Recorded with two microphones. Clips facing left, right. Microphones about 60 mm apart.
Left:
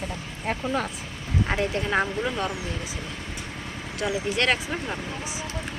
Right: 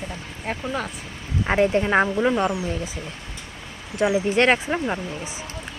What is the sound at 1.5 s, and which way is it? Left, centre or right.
Speech, right.